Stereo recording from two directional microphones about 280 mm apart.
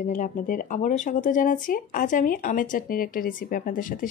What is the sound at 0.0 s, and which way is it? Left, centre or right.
Speech, left.